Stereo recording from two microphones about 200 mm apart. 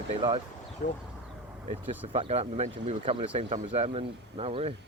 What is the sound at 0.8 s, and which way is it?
Speech, 40° left (ahead or behind).